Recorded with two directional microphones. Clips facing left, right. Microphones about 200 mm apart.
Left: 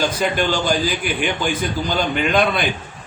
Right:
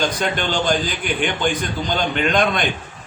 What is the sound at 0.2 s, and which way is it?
A man's voice, 5° left (ahead or behind).